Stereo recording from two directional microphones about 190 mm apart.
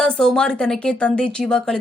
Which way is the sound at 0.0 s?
5° left (ahead or behind).